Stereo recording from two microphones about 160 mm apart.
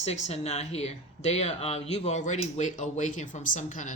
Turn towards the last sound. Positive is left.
turn(degrees=50)  # may be behind; listen again after turning